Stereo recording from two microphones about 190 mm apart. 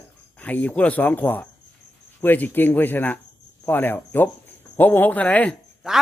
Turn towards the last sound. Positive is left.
turn(degrees=-5)  # may be behind; listen again after turning